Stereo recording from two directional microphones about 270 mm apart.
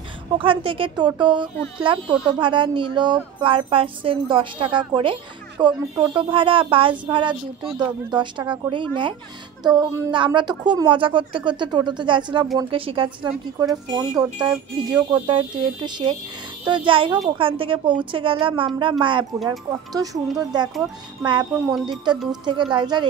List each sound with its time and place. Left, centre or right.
0.4 s a woman's voice: centre
13.3 s a woman's voice: centre